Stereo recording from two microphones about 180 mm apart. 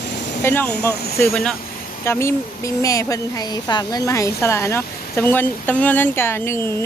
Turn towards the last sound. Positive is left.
turn(degrees=15)  # may be behind; listen again after turning